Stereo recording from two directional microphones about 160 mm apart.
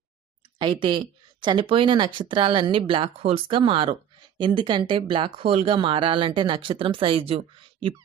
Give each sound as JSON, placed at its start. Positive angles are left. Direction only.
{"t": 0.6, "sound": "speech", "side_deg": -30}